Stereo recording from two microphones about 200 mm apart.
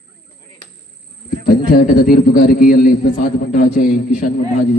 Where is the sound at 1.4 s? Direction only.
45° left (ahead or behind).